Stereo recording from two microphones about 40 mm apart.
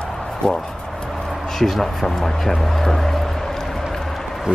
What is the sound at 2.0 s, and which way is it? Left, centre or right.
Vehicle, centre.